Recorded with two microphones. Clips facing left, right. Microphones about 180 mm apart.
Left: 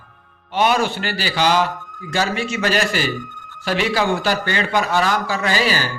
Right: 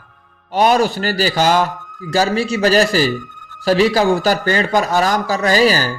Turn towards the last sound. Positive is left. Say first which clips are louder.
# right 6 dB
turn(degrees=-40)  # may be behind; listen again after turning